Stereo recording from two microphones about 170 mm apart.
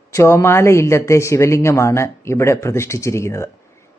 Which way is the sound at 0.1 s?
15° left (ahead or behind).